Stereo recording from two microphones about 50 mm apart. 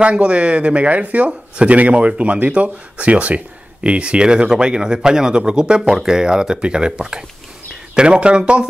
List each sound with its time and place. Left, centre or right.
0.0 s speech: right